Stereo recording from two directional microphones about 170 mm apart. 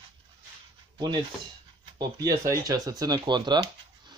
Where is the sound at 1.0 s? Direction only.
25° right (ahead or behind).